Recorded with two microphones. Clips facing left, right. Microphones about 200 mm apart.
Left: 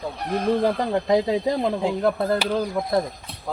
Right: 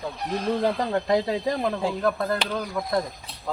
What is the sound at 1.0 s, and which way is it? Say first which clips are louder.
Speech: left 5 dB; 20° left (ahead or behind).